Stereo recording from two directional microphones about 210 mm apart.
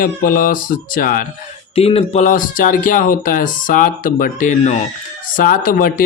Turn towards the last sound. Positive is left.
turn(degrees=40)  # may be behind; listen again after turning